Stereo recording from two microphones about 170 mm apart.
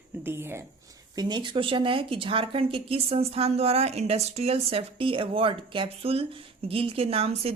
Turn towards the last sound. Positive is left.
turn(degrees=-35)  # may be behind; listen again after turning